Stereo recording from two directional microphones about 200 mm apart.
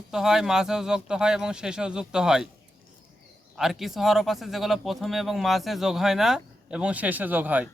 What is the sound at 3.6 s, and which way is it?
Speech, centre (ahead or behind).